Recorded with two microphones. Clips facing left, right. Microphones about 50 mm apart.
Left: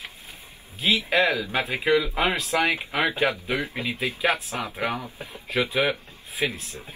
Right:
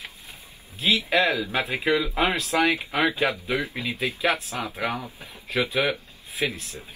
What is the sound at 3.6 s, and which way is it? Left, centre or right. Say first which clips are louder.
Speech: even; left.